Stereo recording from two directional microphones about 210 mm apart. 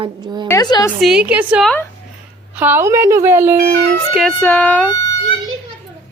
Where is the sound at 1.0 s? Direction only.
5° right (ahead or behind).